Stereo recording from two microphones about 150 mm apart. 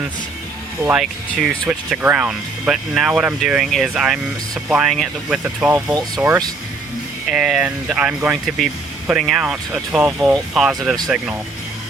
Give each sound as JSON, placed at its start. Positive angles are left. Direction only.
{"t": 0.8, "sound": "speech", "side_deg": -10}
{"t": 5.9, "sound": "speech", "side_deg": -25}
{"t": 7.3, "sound": "speech", "side_deg": -5}
{"t": 8.4, "sound": "speech", "side_deg": 0}